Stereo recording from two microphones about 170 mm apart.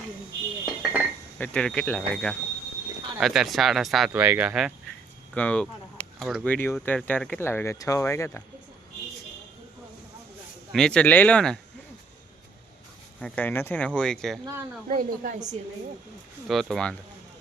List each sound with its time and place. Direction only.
0.6 s dishes: 5° right (ahead or behind)
1.4 s speech: 5° left (ahead or behind)
5.3 s a sound: 5° left (ahead or behind)
6.4 s speech: 10° left (ahead or behind)
10.7 s speech: 5° left (ahead or behind)
13.1 s speech: 5° left (ahead or behind)
14.8 s a woman's voice: 45° right (ahead or behind)
16.5 s speech: centre (ahead or behind)